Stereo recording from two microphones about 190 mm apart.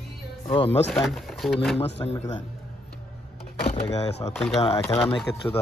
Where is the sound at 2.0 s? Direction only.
20° left (ahead or behind).